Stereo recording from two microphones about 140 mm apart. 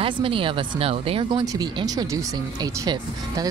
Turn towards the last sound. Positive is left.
turn(degrees=-25)  # may be behind; listen again after turning